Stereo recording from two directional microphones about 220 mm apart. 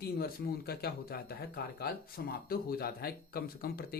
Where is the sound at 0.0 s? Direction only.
45° left (ahead or behind).